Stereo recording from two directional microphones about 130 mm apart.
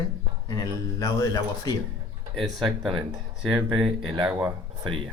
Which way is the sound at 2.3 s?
Centre (ahead or behind).